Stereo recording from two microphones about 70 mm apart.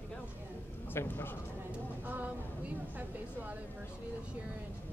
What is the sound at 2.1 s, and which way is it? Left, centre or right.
Speech, right.